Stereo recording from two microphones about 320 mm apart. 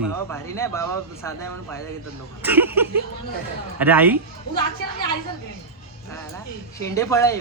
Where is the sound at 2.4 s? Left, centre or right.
Centre.